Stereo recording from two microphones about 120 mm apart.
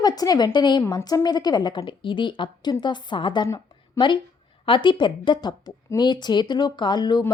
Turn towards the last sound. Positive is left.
turn(degrees=35)  # may be behind; listen again after turning